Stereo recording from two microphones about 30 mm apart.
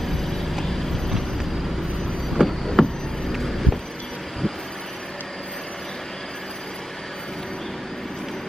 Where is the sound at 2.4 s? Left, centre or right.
Right.